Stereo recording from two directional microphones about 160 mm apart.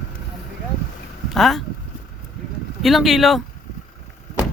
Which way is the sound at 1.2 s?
Centre (ahead or behind).